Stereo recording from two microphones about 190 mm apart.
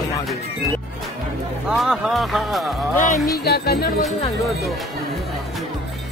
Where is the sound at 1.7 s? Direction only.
Centre (ahead or behind).